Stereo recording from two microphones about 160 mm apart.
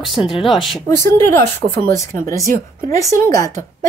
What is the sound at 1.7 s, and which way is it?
Speech, 15° left (ahead or behind).